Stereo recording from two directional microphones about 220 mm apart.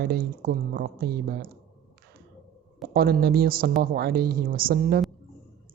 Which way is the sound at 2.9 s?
45° right (ahead or behind).